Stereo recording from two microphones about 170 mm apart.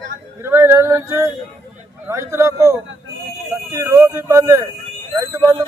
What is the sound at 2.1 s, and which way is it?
Speech, 15° right (ahead or behind).